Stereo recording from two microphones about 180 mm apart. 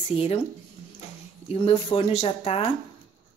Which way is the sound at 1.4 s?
30° left (ahead or behind).